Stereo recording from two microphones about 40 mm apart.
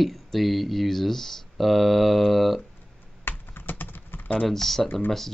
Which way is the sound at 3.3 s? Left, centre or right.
Left.